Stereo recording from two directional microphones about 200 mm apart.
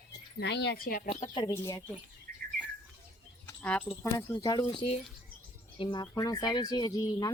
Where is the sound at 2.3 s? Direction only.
45° right (ahead or behind).